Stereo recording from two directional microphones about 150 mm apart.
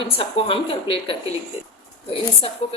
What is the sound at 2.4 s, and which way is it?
Speech, 40° left (ahead or behind).